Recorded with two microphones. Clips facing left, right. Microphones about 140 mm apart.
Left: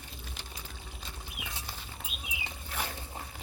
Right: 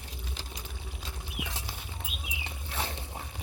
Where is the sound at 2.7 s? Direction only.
25° right (ahead or behind).